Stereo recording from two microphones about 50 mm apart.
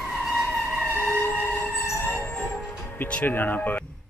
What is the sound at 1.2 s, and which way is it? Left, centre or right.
Music, left.